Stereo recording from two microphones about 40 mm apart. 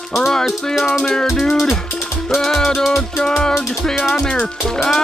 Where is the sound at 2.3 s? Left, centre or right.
Centre.